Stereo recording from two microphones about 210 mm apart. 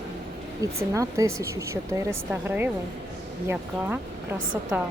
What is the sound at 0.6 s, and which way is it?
Speech, 15° right (ahead or behind).